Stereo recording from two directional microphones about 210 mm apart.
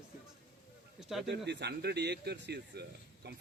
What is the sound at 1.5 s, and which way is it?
Speech, 55° right (ahead or behind).